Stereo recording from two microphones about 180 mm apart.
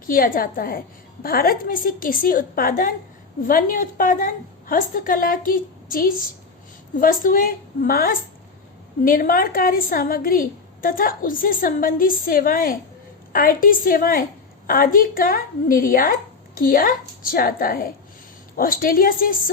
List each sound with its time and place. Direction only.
0.1 s a woman's voice: 50° left (ahead or behind)